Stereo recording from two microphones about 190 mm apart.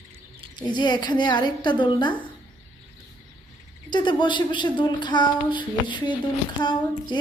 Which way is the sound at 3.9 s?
25° left (ahead or behind).